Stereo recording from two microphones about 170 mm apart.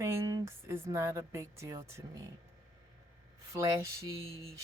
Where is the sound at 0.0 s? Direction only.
15° right (ahead or behind).